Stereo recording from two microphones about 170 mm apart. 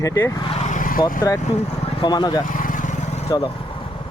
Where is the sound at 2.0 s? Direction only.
25° left (ahead or behind).